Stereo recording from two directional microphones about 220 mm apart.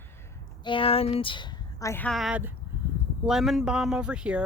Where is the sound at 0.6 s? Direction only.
25° left (ahead or behind).